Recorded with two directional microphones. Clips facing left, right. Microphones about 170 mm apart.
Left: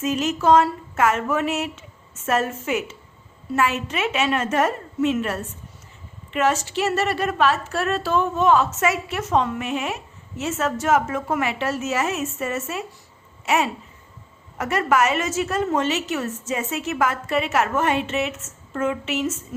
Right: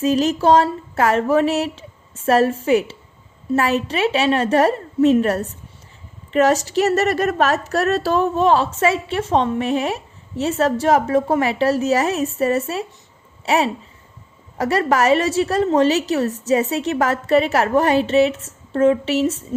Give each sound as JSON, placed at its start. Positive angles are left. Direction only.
{"t": 0.0, "sound": "a woman's voice", "side_deg": -35}